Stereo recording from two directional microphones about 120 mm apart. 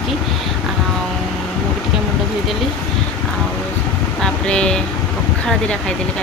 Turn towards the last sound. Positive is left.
turn(degrees=10)  # may be behind; listen again after turning